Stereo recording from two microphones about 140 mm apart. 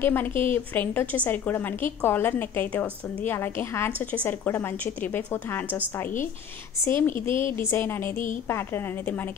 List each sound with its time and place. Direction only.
0.0 s a woman's voice: 15° left (ahead or behind)
0.3 s a woman's voice: 40° right (ahead or behind)
0.7 s a woman's voice: 10° left (ahead or behind)
6.8 s a woman's voice: 15° left (ahead or behind)